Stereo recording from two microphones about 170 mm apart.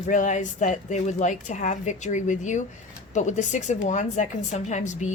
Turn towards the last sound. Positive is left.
turn(degrees=45)  # may be behind; listen again after turning